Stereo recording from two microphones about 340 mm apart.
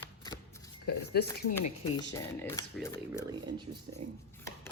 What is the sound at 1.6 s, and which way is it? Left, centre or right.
Speech, centre.